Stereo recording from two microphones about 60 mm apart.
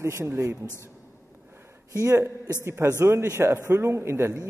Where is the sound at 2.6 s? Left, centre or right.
Right.